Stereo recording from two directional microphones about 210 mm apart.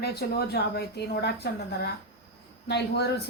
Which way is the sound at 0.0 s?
50° left (ahead or behind).